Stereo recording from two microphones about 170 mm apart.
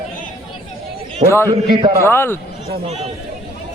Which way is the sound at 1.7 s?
25° right (ahead or behind).